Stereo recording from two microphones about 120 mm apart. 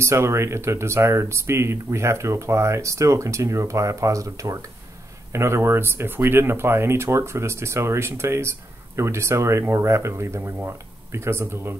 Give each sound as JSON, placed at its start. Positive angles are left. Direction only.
{"t": 0.0, "sound": "speech", "side_deg": -25}